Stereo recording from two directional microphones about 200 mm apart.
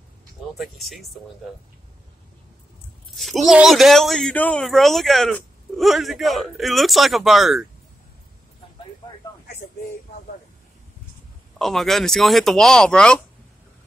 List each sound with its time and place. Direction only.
0.6 s speech: centre (ahead or behind)
3.2 s speech: centre (ahead or behind)
11.5 s speech: centre (ahead or behind)